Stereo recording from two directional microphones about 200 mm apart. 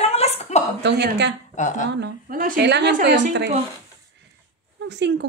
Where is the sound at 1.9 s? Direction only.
50° right (ahead or behind).